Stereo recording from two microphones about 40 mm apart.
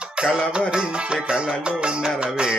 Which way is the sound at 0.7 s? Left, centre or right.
Right.